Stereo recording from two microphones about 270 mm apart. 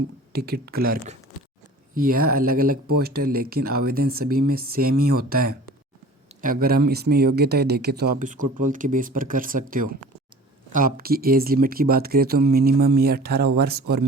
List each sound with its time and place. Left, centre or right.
0.3 s speech: right